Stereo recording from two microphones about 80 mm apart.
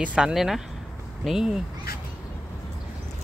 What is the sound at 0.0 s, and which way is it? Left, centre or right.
Speech, centre.